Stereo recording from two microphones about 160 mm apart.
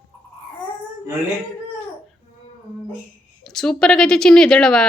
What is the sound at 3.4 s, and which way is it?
A woman's voice, 5° left (ahead or behind).